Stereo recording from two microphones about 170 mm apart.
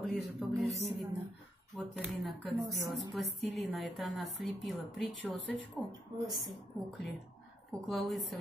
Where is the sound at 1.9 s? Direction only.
Centre (ahead or behind).